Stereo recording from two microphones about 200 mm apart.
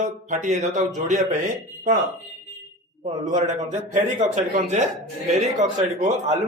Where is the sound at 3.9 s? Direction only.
35° right (ahead or behind).